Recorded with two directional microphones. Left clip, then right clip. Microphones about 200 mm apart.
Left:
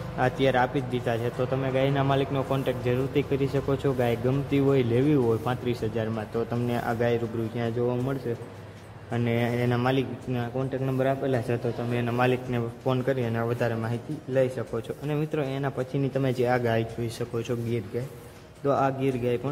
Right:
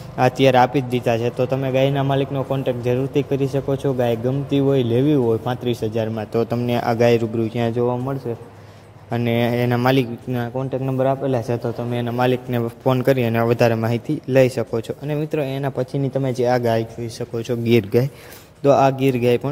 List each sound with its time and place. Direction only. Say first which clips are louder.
0.2 s a man's voice: right 9 dB; 25° right (ahead or behind)
9.1 s a man's voice: right 7 dB; 30° right (ahead or behind)
14.7 s a man's voice: right 7 dB; 20° right (ahead or behind)
17.6 s speech: right 14 dB; 50° right (ahead or behind)
18.6 s a man's voice: right 10 dB; 25° right (ahead or behind)